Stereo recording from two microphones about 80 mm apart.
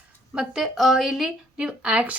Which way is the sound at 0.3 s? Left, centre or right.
Centre.